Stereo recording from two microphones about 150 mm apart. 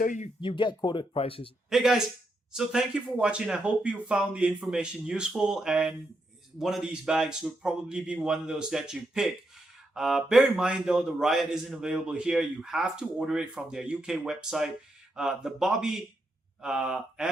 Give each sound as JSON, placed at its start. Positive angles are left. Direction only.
{"t": 0.0, "sound": "speech", "side_deg": 60}
{"t": 0.4, "sound": "speech", "side_deg": 30}
{"t": 1.7, "sound": "a man's voice", "side_deg": 0}